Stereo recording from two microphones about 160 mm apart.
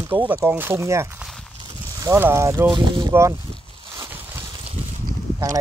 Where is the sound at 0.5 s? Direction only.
15° right (ahead or behind).